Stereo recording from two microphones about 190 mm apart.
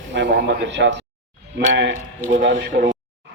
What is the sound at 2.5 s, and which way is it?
Speech, 45° right (ahead or behind).